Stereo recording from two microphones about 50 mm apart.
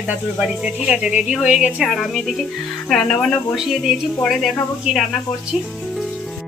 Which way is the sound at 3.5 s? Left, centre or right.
Centre.